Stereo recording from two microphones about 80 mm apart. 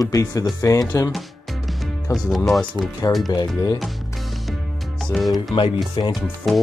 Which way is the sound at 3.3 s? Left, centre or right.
Left.